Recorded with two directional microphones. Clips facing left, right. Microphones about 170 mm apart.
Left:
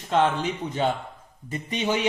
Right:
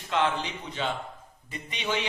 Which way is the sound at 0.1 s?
45° left (ahead or behind).